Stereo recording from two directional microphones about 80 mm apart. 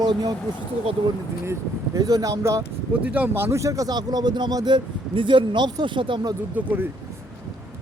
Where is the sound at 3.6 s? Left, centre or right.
Right.